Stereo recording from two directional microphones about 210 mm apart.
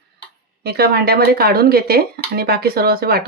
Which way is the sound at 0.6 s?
50° right (ahead or behind).